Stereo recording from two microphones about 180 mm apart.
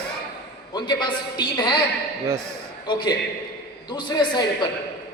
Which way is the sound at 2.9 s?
25° left (ahead or behind).